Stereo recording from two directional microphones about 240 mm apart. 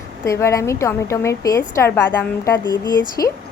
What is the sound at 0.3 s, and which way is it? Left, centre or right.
A woman's voice, centre.